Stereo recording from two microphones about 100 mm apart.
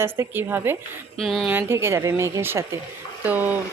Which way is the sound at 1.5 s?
25° right (ahead or behind).